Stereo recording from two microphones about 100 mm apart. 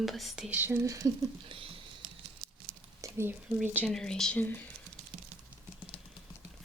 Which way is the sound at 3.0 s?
30° right (ahead or behind).